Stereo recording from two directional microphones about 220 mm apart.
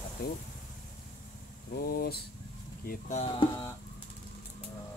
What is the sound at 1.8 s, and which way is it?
Speech, 45° left (ahead or behind).